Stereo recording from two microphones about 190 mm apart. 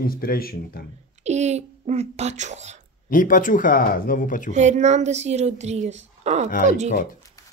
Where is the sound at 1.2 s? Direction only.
35° right (ahead or behind).